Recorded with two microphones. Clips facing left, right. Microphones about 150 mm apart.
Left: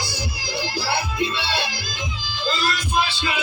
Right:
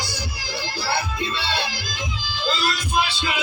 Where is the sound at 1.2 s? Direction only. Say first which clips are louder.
Left 2 dB; 5° left (ahead or behind).